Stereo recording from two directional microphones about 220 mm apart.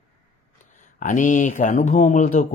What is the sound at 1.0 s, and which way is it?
Speech, 35° left (ahead or behind).